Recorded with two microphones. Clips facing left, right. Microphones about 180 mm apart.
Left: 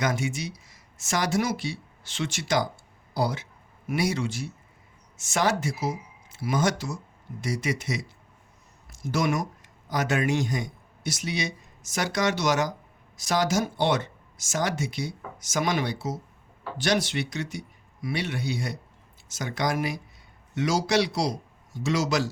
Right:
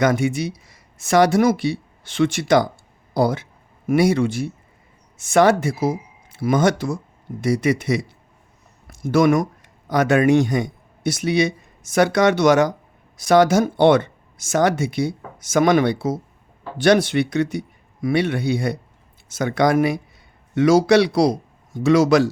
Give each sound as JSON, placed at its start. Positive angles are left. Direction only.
{"t": 0.0, "sound": "speech", "side_deg": -55}